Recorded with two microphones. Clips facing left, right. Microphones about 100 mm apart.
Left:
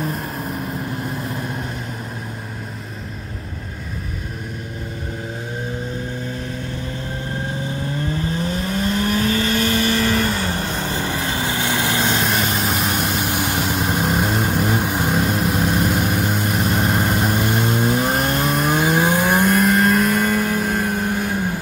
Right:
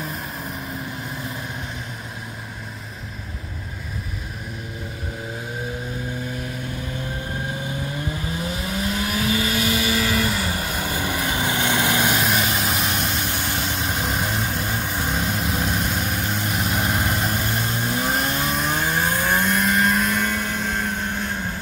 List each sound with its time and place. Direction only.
0.0 s vehicle: centre (ahead or behind)
8.1 s vehicle: 10° right (ahead or behind)
12.2 s vehicle: centre (ahead or behind)
13.2 s vehicle: 15° left (ahead or behind)
17.4 s vehicle: 20° left (ahead or behind)
17.9 s vehicle: centre (ahead or behind)
18.8 s a sound: 15° left (ahead or behind)
19.4 s vehicle: centre (ahead or behind)